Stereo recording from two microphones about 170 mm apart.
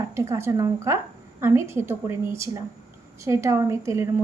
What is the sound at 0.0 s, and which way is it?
A woman's voice, 15° right (ahead or behind).